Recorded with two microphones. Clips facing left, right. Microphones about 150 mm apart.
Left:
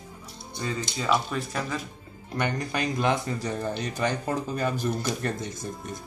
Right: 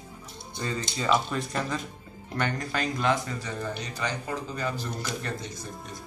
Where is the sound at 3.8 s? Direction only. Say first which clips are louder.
Left 5 dB; 50° left (ahead or behind).